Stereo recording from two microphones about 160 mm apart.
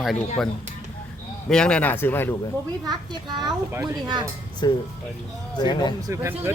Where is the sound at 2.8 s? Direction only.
25° right (ahead or behind).